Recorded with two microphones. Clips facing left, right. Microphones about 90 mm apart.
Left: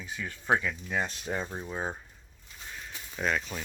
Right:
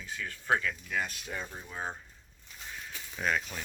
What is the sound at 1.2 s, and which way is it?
Speech, 40° left (ahead or behind).